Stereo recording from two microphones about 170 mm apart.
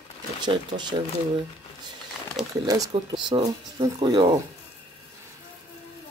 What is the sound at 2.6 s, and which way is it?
Speech, 20° right (ahead or behind).